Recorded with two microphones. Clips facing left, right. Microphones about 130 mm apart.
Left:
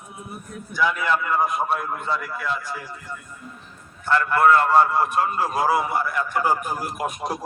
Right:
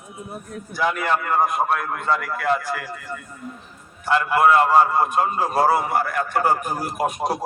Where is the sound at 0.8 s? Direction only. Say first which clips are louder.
Even; 55° right (ahead or behind); by 3.2 s 85° right.